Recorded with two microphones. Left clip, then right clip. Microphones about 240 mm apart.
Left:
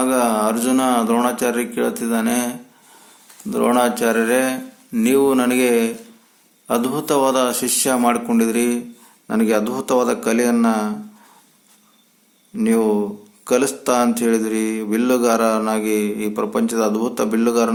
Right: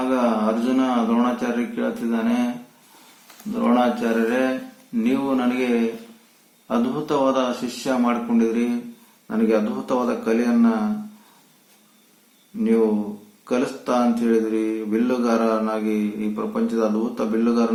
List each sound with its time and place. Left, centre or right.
0.0 s mantra: left
3.5 s mantra: left
12.5 s mantra: left